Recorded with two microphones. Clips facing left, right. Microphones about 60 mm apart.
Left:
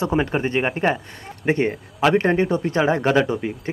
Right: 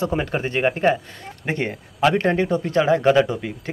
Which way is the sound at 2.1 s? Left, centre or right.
Left.